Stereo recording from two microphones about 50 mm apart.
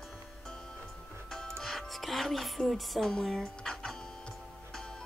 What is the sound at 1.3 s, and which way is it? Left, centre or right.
Music, centre.